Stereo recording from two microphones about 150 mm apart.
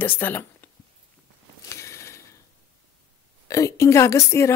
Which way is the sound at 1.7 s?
20° left (ahead or behind).